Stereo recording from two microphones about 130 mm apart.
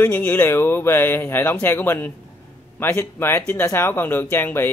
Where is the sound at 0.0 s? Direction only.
15° left (ahead or behind).